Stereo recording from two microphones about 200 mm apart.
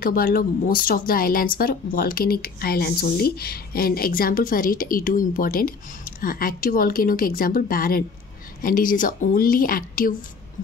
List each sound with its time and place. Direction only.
0.0 s speech: 45° left (ahead or behind)